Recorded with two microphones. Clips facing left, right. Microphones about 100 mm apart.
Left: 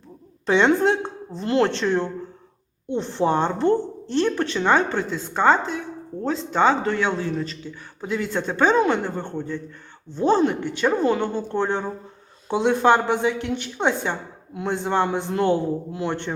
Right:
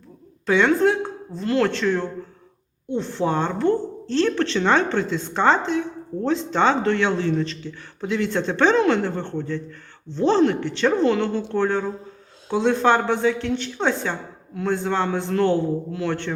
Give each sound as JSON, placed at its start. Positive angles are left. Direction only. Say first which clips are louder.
{"t": 0.4, "sound": "a woman's voice", "louder": "even", "side_deg": 25}